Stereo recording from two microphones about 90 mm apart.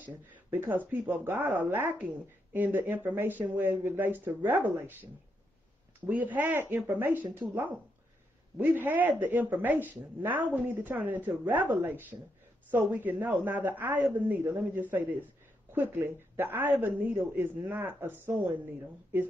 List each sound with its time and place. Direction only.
0.0 s speech: 20° right (ahead or behind)
6.0 s speech: 20° right (ahead or behind)